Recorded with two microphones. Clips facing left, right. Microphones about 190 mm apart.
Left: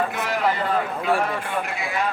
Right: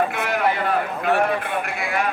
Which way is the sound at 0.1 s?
60° right (ahead or behind).